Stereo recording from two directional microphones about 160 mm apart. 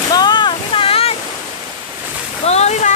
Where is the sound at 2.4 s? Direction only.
45° left (ahead or behind).